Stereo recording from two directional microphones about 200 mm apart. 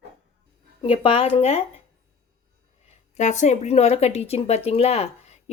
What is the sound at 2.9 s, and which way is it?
Speech, 35° left (ahead or behind).